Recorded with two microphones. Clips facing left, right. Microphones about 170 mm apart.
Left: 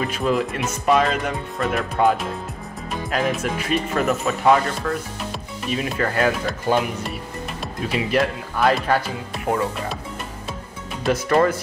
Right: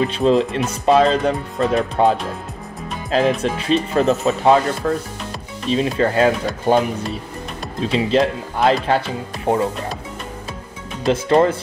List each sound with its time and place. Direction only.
0.0 s speech: 25° right (ahead or behind)
7.8 s speech: 25° right (ahead or behind)
11.1 s speech: 25° right (ahead or behind)